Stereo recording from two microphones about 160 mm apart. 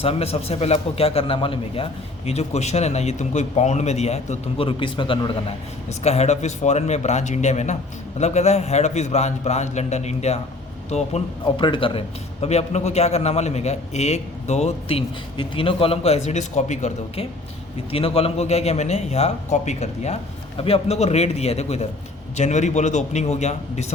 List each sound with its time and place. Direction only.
0.0 s speech: 40° left (ahead or behind)
11.4 s a man's voice: 30° left (ahead or behind)